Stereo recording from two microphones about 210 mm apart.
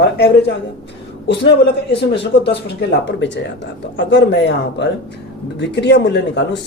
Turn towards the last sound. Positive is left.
turn(degrees=55)  # may be behind; listen again after turning